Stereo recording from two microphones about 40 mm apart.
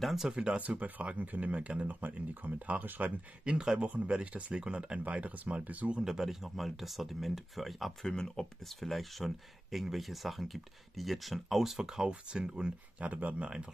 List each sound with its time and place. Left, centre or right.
0.0 s speech: centre
0.6 s speech: right
1.9 s speech: right
3.4 s speech: right
3.8 s speech: right
5.0 s speech: right
6.0 s speech: centre
8.0 s speech: centre
8.6 s speech: centre
12.1 s speech: right
13.0 s speech: right